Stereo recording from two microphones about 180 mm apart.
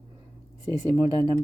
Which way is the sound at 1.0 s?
20° right (ahead or behind).